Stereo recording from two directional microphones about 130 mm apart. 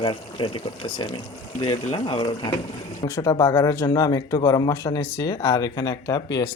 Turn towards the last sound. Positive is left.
turn(degrees=30)  # may be behind; listen again after turning